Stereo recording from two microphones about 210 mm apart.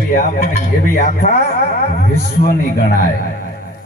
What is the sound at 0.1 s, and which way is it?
A man's voice, 35° left (ahead or behind).